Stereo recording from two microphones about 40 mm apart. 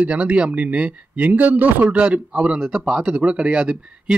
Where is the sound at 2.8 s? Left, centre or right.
Centre.